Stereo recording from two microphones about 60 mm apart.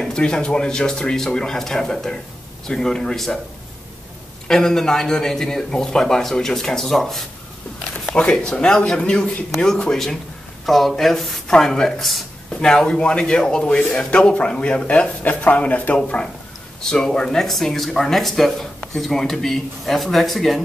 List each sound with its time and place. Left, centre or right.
0.0 s a man's voice: centre
4.5 s a man's voice: centre
8.1 s a man's voice: centre
12.5 s a man's voice: centre
16.9 s speech: centre